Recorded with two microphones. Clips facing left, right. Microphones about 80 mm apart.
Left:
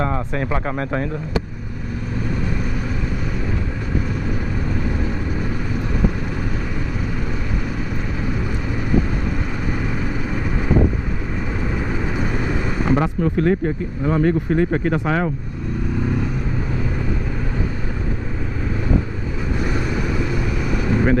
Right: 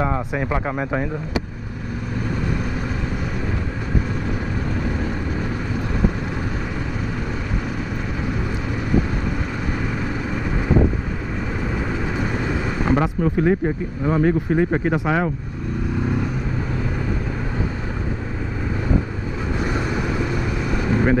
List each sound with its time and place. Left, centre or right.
0.0 s speech: centre
12.8 s speech: centre
19.7 s vehicle: right
20.6 s vehicle: centre